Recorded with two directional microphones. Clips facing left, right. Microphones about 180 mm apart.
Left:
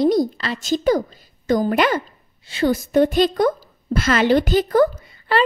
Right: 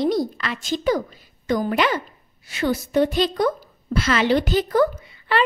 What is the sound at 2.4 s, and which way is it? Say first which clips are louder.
Speech: left 4 dB; 30° left (ahead or behind).